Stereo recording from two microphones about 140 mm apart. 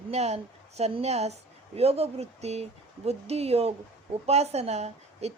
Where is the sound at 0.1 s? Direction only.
50° right (ahead or behind).